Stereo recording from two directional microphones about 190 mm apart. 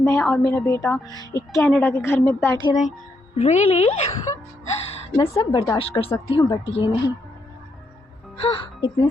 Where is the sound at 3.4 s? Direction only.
35° left (ahead or behind).